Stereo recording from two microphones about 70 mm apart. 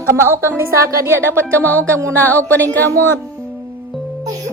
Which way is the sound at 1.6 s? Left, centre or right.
Left.